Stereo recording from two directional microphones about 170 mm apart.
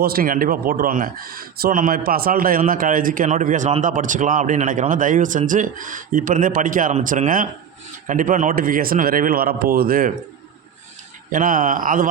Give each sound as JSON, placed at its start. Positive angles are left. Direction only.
{"t": 0.0, "sound": "a man's voice", "side_deg": -60}
{"t": 11.3, "sound": "a man's voice", "side_deg": -55}